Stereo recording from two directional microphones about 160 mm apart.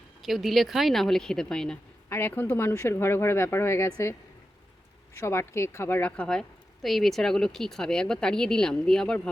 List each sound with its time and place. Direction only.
0.2 s speech: centre (ahead or behind); by 4.1 s 15° left (ahead or behind)
5.1 s speech: 15° left (ahead or behind)